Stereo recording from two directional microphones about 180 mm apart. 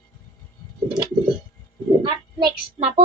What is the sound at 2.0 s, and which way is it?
Speech, 25° right (ahead or behind).